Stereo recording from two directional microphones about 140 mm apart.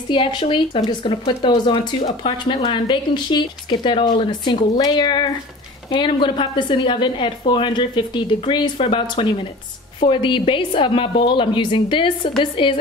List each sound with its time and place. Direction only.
0.1 s speech: 35° left (ahead or behind)